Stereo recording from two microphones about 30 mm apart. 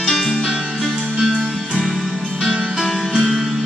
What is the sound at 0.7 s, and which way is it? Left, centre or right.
Music, right.